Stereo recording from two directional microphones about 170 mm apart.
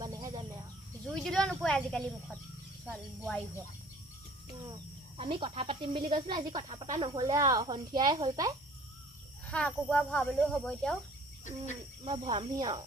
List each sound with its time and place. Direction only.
0.0 s bird: 20° right (ahead or behind)
1.0 s speech: centre (ahead or behind)
5.1 s speech: 30° right (ahead or behind)
9.5 s speech: 5° left (ahead or behind)
12.0 s speech: 30° right (ahead or behind)